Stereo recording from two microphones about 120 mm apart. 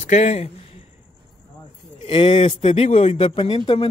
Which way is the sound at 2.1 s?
50° left (ahead or behind).